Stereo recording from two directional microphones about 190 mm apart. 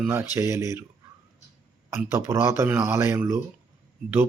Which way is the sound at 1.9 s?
15° right (ahead or behind).